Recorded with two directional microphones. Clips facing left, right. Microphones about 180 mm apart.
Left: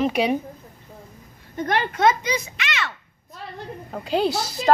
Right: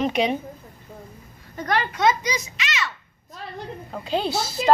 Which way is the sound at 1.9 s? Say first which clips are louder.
Left 3 dB; 55° left (ahead or behind).